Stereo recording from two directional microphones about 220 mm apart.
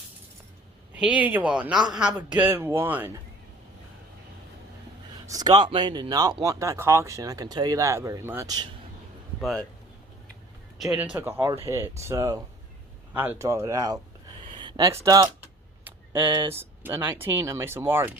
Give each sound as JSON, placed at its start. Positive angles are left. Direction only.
{"t": 0.9, "sound": "speech", "side_deg": -5}
{"t": 5.2, "sound": "speech", "side_deg": -15}
{"t": 9.4, "sound": "speech", "side_deg": 0}
{"t": 10.8, "sound": "speech", "side_deg": 0}
{"t": 14.5, "sound": "a sound", "side_deg": -20}
{"t": 15.0, "sound": "speech", "side_deg": -15}
{"t": 15.8, "sound": "a sound", "side_deg": -10}
{"t": 16.4, "sound": "speech", "side_deg": -10}